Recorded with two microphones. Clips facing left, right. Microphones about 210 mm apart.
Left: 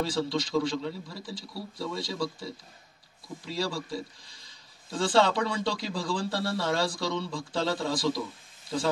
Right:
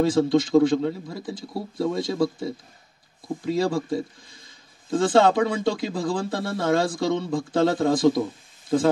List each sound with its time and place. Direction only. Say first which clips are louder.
0.0 s speech: right 10 dB; 50° right (ahead or behind)